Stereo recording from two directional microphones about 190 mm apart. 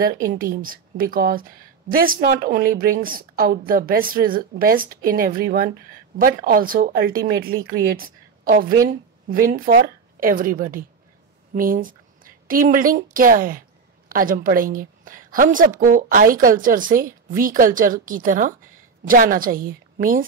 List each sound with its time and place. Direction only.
0.1 s a woman's voice: 45° right (ahead or behind)